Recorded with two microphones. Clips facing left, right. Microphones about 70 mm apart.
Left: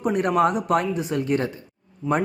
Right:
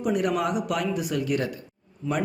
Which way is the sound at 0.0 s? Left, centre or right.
Left.